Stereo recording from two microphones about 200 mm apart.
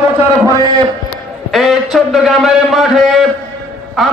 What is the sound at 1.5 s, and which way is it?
A man's voice, centre (ahead or behind).